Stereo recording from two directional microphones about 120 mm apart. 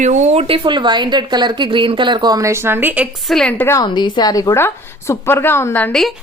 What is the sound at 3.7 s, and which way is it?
A woman's voice, 35° left (ahead or behind).